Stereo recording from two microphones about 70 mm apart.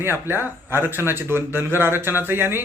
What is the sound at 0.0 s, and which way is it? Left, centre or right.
A man's voice, right.